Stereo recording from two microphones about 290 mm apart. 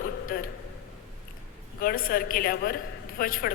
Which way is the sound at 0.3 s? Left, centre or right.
Left.